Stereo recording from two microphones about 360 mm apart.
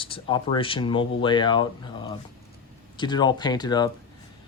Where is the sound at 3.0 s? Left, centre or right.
Centre.